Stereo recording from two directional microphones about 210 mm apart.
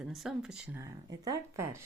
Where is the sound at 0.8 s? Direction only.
15° right (ahead or behind).